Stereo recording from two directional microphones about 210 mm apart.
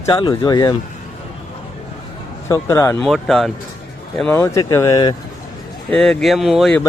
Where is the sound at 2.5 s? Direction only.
15° left (ahead or behind).